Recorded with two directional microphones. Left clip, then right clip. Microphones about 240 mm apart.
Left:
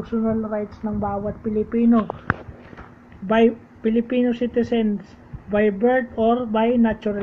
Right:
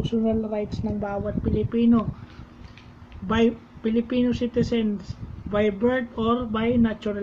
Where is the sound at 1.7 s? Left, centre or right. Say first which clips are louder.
Left 2 dB; centre.